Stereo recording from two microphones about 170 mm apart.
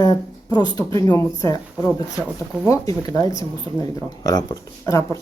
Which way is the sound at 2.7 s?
20° left (ahead or behind).